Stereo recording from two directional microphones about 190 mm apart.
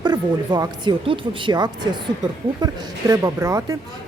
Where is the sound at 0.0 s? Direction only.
20° right (ahead or behind).